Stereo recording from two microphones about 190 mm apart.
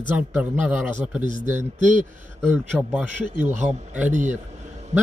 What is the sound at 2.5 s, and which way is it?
Speech, 10° right (ahead or behind).